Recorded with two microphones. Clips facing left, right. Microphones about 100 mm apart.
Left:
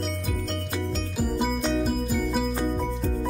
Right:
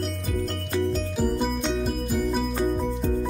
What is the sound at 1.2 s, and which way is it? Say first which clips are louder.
Music: even; centre (ahead or behind).